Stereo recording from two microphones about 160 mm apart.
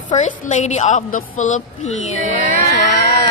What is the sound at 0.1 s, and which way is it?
A woman's voice, 50° left (ahead or behind).